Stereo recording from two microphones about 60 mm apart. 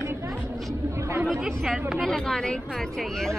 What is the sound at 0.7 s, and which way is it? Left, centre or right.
Chatter, right.